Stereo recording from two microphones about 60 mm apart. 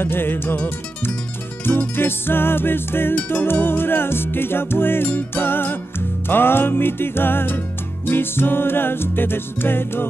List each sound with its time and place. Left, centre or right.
0.0 s music: left
1.6 s music: left